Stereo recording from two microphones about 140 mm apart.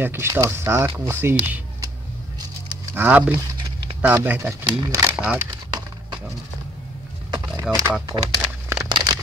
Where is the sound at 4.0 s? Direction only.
15° right (ahead or behind).